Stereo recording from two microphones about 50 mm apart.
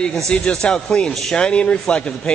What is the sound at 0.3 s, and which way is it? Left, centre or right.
A man's voice, centre.